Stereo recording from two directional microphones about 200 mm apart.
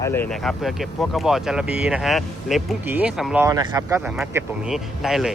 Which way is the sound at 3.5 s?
15° right (ahead or behind).